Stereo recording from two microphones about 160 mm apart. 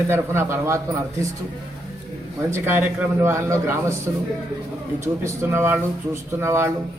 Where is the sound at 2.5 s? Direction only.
15° right (ahead or behind).